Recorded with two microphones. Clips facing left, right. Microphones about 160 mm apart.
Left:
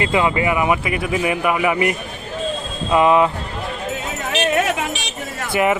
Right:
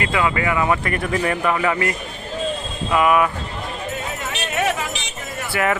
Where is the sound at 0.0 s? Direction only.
25° left (ahead or behind).